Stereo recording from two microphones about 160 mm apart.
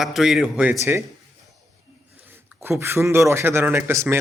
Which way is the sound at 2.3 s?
15° right (ahead or behind).